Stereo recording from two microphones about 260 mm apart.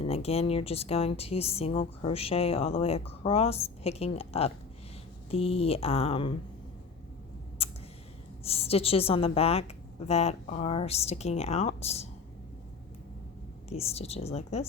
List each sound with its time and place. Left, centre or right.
0.1 s speech: left
7.6 s a sound: left
8.4 s speech: left
13.7 s speech: left